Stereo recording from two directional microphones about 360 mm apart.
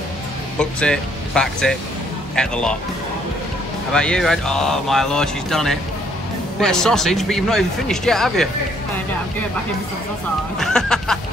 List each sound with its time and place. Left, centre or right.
0.6 s speech: centre
3.9 s speech: centre
10.6 s speech: centre